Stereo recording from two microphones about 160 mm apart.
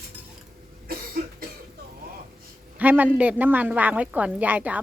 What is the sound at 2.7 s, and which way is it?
A woman's voice, 10° right (ahead or behind).